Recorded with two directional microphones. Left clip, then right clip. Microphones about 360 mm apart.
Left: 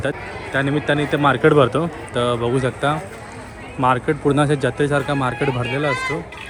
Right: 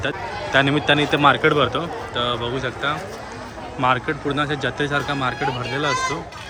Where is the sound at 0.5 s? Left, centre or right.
Centre.